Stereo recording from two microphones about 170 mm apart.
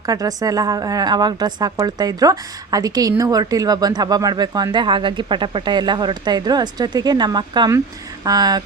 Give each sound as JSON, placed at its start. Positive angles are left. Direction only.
{"t": 0.0, "sound": "a woman's voice", "side_deg": -20}